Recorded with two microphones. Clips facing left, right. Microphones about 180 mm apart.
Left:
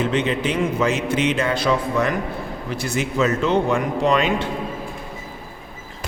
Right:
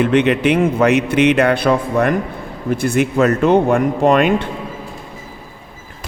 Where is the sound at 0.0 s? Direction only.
65° right (ahead or behind).